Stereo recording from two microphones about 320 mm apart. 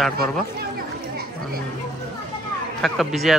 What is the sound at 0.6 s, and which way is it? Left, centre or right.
Chatter, right.